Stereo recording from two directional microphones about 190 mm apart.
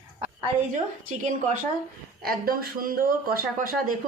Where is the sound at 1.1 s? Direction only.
40° right (ahead or behind).